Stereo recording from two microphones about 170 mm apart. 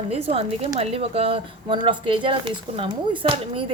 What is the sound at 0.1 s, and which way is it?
Speech, 35° right (ahead or behind).